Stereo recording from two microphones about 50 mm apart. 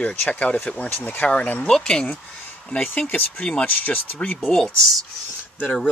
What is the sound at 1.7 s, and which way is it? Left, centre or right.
Speech, centre.